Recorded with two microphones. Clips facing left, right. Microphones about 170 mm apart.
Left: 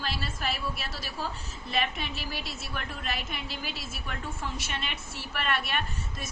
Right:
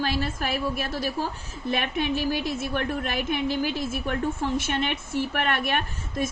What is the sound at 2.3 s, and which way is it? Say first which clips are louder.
A woman's voice: right 11 dB; 50° right (ahead or behind).